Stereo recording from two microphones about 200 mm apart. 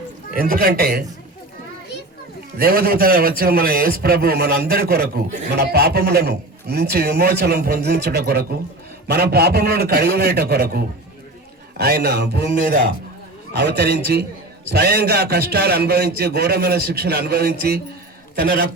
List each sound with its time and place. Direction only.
0.3 s a man's voice: 50° right (ahead or behind)
2.6 s a man's voice: 50° right (ahead or behind)
13.6 s a man's voice: 55° right (ahead or behind)